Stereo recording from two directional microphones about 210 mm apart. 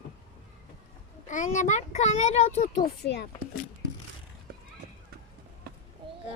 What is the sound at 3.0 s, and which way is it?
Speech, 50° left (ahead or behind).